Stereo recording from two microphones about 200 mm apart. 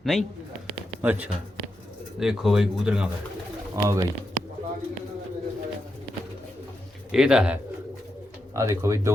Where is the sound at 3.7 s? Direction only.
15° right (ahead or behind).